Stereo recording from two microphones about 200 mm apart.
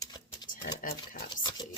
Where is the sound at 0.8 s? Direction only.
40° left (ahead or behind).